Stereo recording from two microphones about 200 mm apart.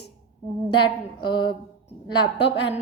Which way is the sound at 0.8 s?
25° left (ahead or behind).